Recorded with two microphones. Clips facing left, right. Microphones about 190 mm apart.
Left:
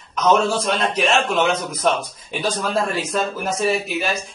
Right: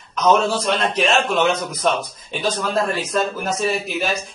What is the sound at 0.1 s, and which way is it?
Speech, centre (ahead or behind).